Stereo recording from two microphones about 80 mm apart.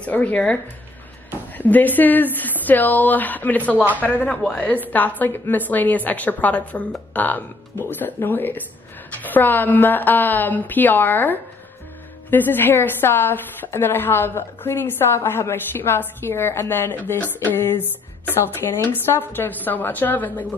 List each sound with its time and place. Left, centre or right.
0.0 s a woman's voice: centre